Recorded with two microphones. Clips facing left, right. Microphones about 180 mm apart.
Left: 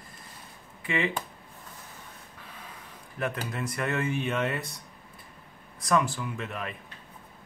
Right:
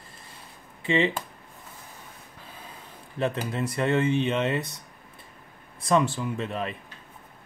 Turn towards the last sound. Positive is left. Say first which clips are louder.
# right 5 dB
turn(degrees=-30)  # may be behind; listen again after turning